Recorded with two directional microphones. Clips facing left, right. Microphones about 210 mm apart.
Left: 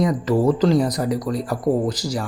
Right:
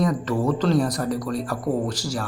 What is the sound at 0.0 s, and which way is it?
A man's voice, 20° left (ahead or behind).